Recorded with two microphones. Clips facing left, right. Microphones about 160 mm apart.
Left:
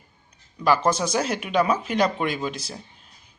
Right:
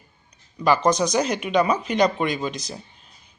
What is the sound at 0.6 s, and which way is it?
Speech, 5° left (ahead or behind).